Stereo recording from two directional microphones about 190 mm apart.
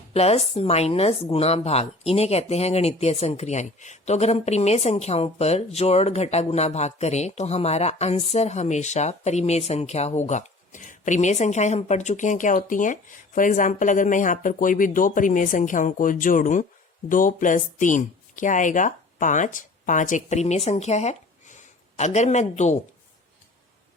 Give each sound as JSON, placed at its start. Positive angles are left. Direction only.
{"t": 0.1, "sound": "a woman's voice", "side_deg": 35}